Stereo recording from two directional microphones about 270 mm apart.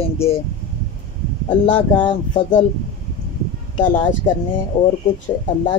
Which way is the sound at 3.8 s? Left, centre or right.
Centre.